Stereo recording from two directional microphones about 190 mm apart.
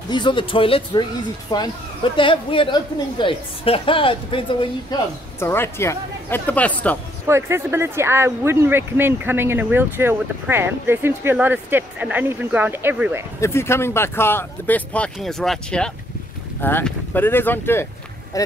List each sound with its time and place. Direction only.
0.1 s a woman's voice: 25° left (ahead or behind); by 7.0 s 10° left (ahead or behind)
7.2 s speech: 15° right (ahead or behind)
13.4 s speech: 15° left (ahead or behind)